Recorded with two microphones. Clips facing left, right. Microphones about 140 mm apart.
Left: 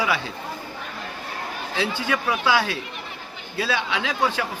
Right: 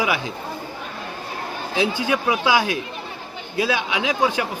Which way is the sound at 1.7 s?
15° right (ahead or behind).